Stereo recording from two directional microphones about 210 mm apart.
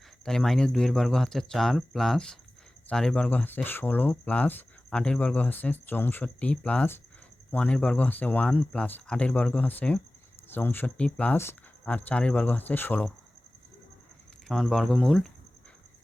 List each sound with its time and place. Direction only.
0.3 s speech: centre (ahead or behind)
14.4 s speech: centre (ahead or behind)